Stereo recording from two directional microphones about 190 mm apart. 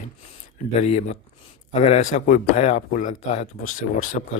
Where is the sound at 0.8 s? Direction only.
35° left (ahead or behind).